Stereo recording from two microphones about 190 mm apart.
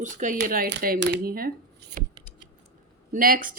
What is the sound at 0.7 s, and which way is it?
Speech, 60° right (ahead or behind).